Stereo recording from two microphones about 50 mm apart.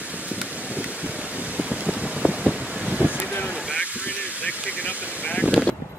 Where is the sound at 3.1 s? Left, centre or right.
Left.